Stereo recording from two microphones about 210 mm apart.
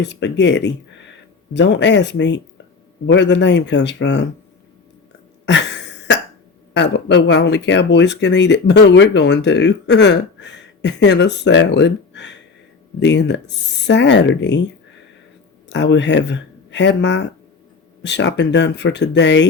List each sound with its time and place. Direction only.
0.0 s speech: 55° left (ahead or behind)
5.5 s a sound: 55° left (ahead or behind)
6.7 s speech: 55° left (ahead or behind)
15.7 s speech: 55° left (ahead or behind)